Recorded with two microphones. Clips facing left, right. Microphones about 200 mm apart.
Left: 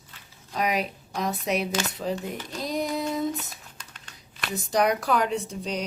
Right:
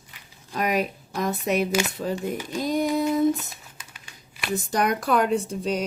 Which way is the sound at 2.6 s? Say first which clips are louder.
Right 5 dB; 50° right (ahead or behind).